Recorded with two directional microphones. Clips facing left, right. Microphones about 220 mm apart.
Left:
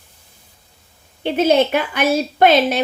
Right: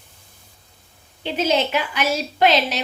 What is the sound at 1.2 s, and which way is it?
A woman's voice, 55° left (ahead or behind).